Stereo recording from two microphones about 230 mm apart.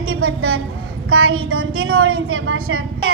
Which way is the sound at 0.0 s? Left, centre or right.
Right.